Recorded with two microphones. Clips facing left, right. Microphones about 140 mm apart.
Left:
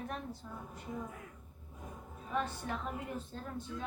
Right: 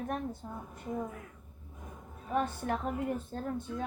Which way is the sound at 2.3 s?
50° right (ahead or behind).